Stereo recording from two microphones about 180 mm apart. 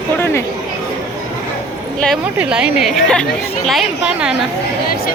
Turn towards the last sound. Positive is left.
turn(degrees=-5)  # may be behind; listen again after turning